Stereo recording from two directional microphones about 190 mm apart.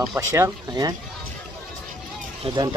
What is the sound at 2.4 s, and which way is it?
Speech, 20° right (ahead or behind).